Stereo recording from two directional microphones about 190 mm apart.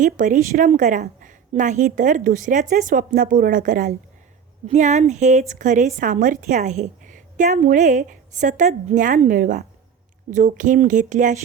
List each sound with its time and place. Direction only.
0.0 s a woman's voice: 40° right (ahead or behind)